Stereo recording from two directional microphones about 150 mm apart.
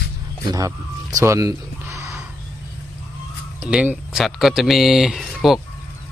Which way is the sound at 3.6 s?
10° right (ahead or behind).